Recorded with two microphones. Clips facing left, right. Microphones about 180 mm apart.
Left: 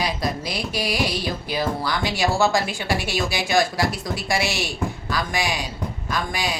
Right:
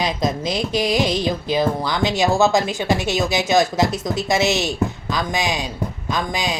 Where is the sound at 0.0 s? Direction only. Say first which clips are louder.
Right 4 dB; 20° right (ahead or behind).